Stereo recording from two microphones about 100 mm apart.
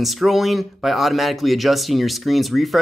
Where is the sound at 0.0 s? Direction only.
Centre (ahead or behind).